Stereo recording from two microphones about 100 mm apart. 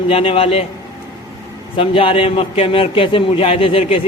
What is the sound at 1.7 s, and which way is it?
A man's voice, 65° left (ahead or behind).